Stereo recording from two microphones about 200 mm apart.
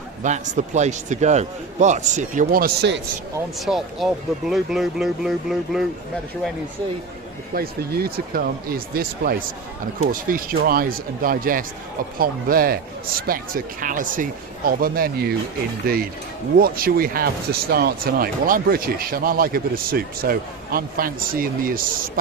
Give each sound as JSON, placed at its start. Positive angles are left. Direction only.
{"t": 0.2, "sound": "a man's voice", "side_deg": -35}
{"t": 3.7, "sound": "speech", "side_deg": 0}
{"t": 7.5, "sound": "speech", "side_deg": -50}
{"t": 16.6, "sound": "speech", "side_deg": -45}